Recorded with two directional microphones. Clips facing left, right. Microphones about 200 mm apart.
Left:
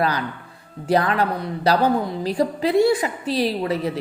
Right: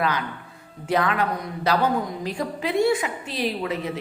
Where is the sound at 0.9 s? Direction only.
35° left (ahead or behind).